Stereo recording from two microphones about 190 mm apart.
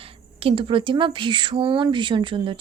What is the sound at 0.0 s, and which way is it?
A woman's voice, 30° right (ahead or behind).